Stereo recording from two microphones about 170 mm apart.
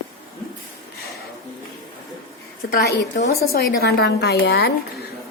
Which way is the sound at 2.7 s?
60° left (ahead or behind).